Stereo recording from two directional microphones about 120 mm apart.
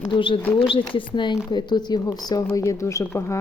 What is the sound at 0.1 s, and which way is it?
Speech, 45° left (ahead or behind).